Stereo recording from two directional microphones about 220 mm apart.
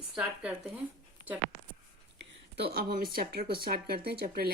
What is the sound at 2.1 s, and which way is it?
A woman's voice, 45° right (ahead or behind).